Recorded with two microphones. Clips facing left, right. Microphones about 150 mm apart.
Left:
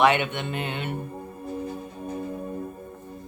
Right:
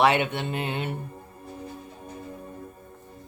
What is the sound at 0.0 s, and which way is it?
Speech, 35° right (ahead or behind).